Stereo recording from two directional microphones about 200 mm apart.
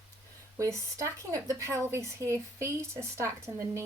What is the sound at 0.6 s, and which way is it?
A woman's voice, 15° right (ahead or behind).